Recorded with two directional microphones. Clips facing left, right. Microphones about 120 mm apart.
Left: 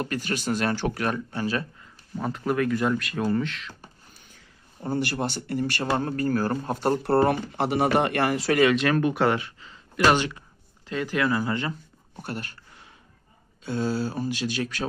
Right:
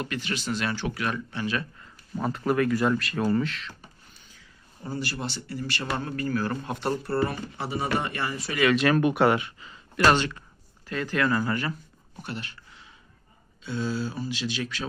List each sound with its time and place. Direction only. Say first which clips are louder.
0.0 s speech: left 3 dB; 45° left (ahead or behind)
2.1 s speech: right 1 dB; centre (ahead or behind)
4.8 s speech: left 6 dB; 60° left (ahead or behind); by 7.0 s 40° left (ahead or behind)
7.0 s speech: left 6 dB; 65° left (ahead or behind); by 8.5 s 85° left
8.7 s speech: right 1 dB; 5° right (ahead or behind)
10.0 s speech: left 1 dB; 15° left (ahead or behind)
12.1 s a sound: left 2 dB; 45° left (ahead or behind)
13.7 s speech: left 3 dB; 45° left (ahead or behind)